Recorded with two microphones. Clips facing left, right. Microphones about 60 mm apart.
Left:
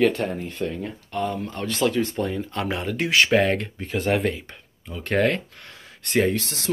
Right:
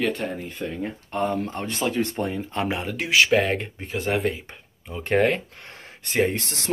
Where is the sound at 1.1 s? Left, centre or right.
Right.